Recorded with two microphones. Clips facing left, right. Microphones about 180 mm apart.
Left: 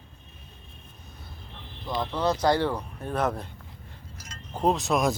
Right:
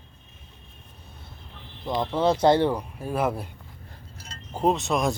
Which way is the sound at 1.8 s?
20° right (ahead or behind).